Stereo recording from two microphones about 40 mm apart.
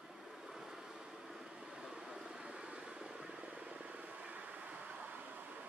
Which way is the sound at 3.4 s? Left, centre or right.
Right.